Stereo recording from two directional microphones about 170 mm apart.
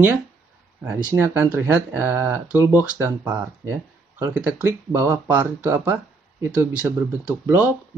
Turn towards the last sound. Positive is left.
turn(degrees=-10)  # may be behind; listen again after turning